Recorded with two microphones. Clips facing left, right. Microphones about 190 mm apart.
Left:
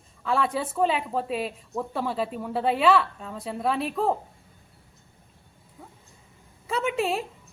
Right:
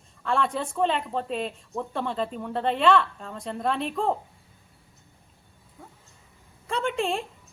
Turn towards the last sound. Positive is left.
turn(degrees=5)  # may be behind; listen again after turning